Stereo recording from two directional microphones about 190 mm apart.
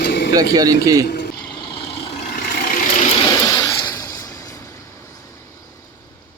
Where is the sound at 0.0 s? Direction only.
60° left (ahead or behind).